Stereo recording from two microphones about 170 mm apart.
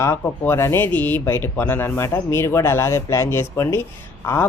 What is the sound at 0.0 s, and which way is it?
A woman's voice, 15° left (ahead or behind).